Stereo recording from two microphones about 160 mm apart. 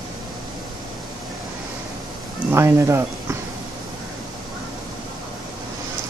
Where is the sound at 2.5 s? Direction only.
15° right (ahead or behind).